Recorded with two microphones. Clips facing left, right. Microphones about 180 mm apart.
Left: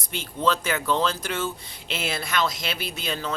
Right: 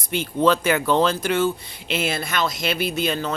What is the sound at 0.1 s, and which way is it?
Speech, 60° right (ahead or behind).